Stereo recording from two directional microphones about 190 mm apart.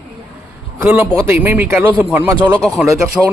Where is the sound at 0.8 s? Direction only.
5° right (ahead or behind).